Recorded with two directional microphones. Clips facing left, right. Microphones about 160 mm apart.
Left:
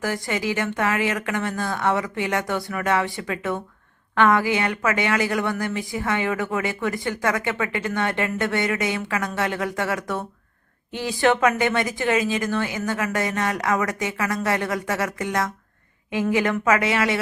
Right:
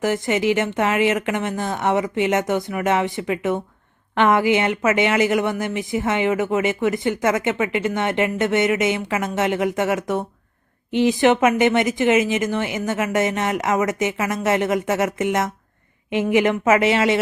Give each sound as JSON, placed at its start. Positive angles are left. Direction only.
{"t": 0.0, "sound": "speech", "side_deg": -20}